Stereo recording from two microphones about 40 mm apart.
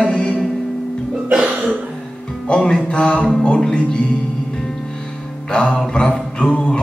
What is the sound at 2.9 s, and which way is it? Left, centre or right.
A man's voice, left.